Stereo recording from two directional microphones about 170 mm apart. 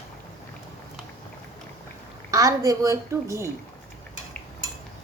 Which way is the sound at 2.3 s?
20° right (ahead or behind).